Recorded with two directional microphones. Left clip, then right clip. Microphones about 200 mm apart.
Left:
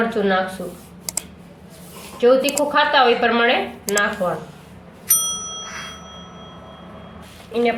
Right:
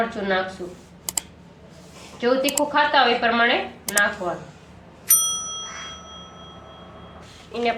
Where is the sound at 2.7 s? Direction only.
30° left (ahead or behind).